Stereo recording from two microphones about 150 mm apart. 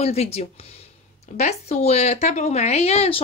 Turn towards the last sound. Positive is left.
turn(degrees=45)  # may be behind; listen again after turning